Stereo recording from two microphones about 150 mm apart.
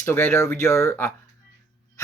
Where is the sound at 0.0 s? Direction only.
15° left (ahead or behind).